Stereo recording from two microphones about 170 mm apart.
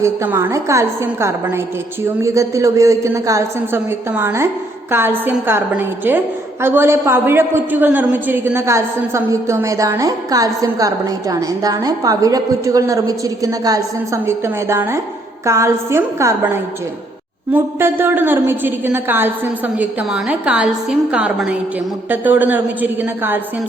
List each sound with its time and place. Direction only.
0.0 s a woman's voice: 15° right (ahead or behind)